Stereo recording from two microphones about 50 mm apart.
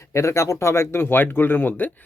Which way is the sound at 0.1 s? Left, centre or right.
Left.